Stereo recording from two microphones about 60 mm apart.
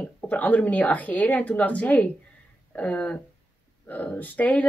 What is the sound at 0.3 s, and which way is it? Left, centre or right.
Speech, left.